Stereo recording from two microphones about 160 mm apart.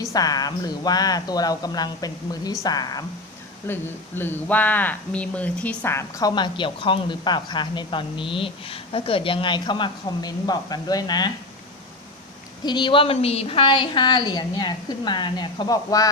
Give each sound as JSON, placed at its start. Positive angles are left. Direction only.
{"t": 0.0, "sound": "speech", "side_deg": 20}
{"t": 3.7, "sound": "speech", "side_deg": 15}
{"t": 12.6, "sound": "speech", "side_deg": 30}